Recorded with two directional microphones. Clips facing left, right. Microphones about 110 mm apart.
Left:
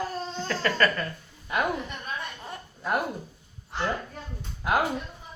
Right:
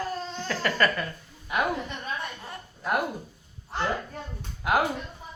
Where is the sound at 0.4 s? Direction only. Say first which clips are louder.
Even; 20° right (ahead or behind).